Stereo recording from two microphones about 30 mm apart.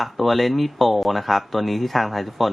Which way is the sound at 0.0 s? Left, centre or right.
Centre.